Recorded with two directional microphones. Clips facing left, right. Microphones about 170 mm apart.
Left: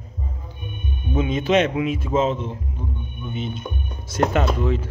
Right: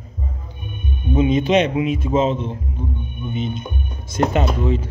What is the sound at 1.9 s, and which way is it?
Speech, 5° left (ahead or behind).